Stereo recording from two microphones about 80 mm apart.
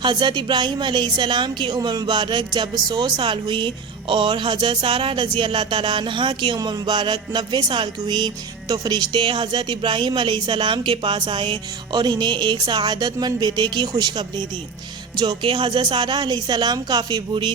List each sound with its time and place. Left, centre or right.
0.0 s speech: right
4.1 s a sound: right
6.6 s a woman's voice: right